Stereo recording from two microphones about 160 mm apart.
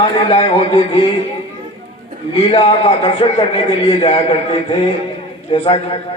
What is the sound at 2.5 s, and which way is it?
A man's voice, 35° left (ahead or behind).